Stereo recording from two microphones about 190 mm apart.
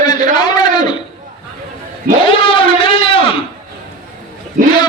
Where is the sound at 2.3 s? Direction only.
25° left (ahead or behind).